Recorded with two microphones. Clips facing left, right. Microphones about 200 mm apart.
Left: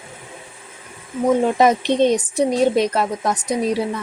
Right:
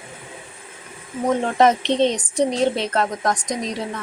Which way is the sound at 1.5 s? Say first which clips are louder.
Left 1 dB; 10° left (ahead or behind).